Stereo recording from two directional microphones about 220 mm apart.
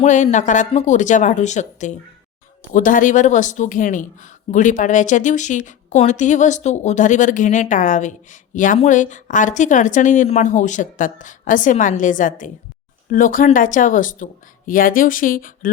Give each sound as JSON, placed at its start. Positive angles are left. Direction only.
{"t": 0.0, "sound": "speech", "side_deg": 35}